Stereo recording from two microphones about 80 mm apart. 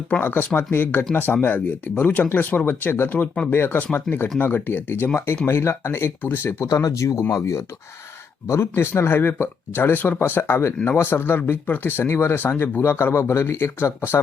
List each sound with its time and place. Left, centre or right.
0.2 s speech: left
6.6 s speech: left